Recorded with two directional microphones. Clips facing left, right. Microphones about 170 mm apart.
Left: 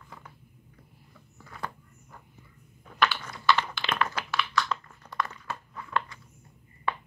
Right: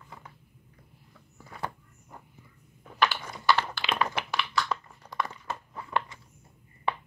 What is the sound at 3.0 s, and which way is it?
Typing, 15° right (ahead or behind).